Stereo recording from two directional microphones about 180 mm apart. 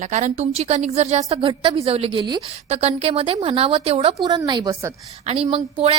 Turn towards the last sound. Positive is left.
turn(degrees=-35)  # may be behind; listen again after turning